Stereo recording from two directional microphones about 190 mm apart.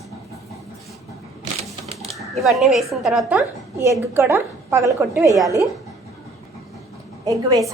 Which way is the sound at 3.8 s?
15° right (ahead or behind).